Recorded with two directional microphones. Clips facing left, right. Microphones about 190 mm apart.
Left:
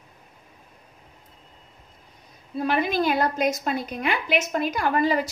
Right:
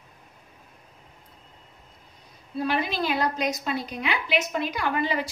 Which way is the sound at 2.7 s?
50° left (ahead or behind).